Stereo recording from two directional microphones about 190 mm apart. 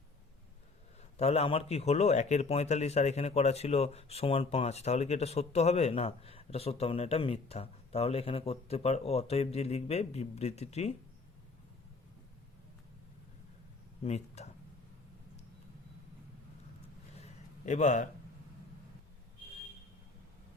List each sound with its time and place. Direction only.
1.1 s speech: 35° left (ahead or behind)
14.0 s speech: 35° left (ahead or behind)
17.2 s a sound: 35° left (ahead or behind)